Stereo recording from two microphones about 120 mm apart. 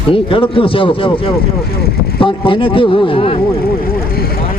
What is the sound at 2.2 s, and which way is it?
A man's voice, 45° left (ahead or behind).